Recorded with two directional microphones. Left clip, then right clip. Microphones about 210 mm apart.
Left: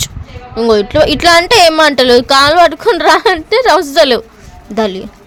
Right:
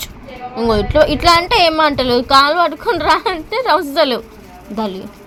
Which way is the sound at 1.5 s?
90° left.